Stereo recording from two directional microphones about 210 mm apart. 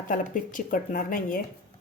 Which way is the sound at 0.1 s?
40° left (ahead or behind).